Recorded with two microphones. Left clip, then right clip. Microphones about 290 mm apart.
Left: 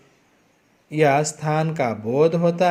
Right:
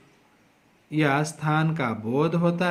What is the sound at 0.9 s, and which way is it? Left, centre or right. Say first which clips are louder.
Speech: left 6 dB; centre.